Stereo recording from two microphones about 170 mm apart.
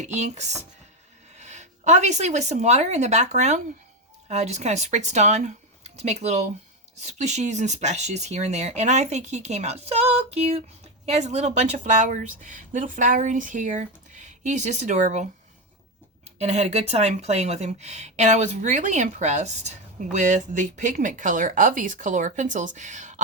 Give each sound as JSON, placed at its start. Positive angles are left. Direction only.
{"t": 0.0, "sound": "speech", "side_deg": -45}
{"t": 16.4, "sound": "speech", "side_deg": -40}